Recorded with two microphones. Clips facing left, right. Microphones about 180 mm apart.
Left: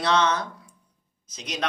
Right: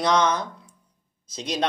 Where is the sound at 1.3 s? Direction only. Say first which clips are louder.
Right 4 dB; 30° right (ahead or behind).